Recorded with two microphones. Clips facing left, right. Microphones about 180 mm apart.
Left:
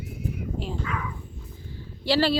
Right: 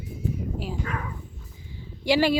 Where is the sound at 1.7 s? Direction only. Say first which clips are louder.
Right 1 dB; 15° right (ahead or behind).